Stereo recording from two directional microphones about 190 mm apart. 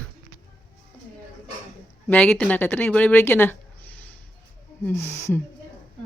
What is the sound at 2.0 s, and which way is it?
Speech, 5° left (ahead or behind).